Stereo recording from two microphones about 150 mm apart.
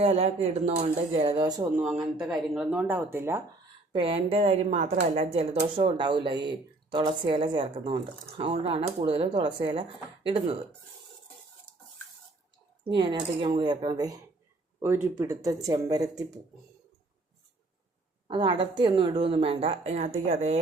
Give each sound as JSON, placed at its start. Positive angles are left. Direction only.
{"t": 0.0, "sound": "speech", "side_deg": -40}
{"t": 1.7, "sound": "a woman's voice", "side_deg": -5}
{"t": 3.9, "sound": "speech", "side_deg": -40}
{"t": 11.7, "sound": "dishes", "side_deg": 5}
{"t": 12.8, "sound": "speech", "side_deg": -35}
{"t": 18.3, "sound": "speech", "side_deg": -30}